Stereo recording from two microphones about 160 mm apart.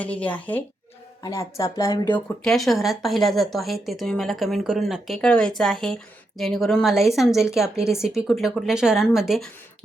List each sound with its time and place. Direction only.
0.0 s speech: 10° left (ahead or behind); by 2.1 s 25° left (ahead or behind)
2.1 s speech: 5° left (ahead or behind)